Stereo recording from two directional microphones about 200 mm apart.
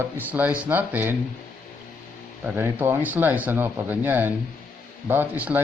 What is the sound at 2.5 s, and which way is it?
Speech, 10° right (ahead or behind).